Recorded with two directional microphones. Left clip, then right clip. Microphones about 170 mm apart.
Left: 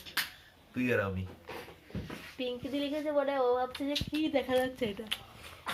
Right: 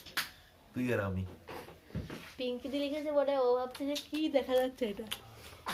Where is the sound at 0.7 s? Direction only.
20° right (ahead or behind).